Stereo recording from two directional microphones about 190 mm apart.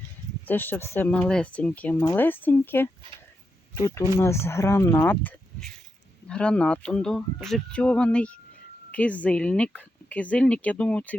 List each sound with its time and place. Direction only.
0.4 s speech: 10° left (ahead or behind)